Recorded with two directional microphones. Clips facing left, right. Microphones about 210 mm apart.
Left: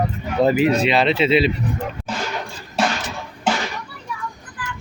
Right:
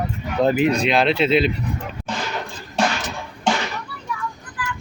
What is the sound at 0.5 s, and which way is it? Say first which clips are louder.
Speech: left 1 dB; 5° left (ahead or behind).